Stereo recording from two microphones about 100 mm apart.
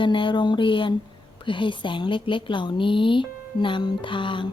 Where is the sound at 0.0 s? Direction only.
55° left (ahead or behind).